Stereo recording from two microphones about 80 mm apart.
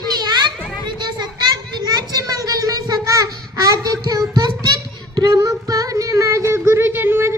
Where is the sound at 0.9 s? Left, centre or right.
Right.